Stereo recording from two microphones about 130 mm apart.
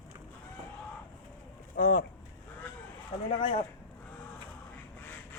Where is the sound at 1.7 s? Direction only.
90° left.